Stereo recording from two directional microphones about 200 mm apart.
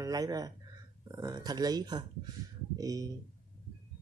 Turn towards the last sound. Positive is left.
turn(degrees=-15)  # may be behind; listen again after turning